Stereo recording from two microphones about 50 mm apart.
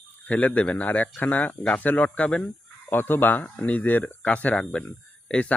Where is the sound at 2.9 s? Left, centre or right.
Left.